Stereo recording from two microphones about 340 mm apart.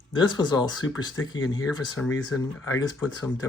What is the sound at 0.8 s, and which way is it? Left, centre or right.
Speech, left.